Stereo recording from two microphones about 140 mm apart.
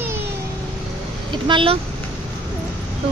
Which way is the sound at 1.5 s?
35° right (ahead or behind).